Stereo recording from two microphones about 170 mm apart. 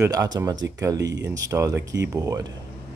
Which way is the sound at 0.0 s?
20° right (ahead or behind).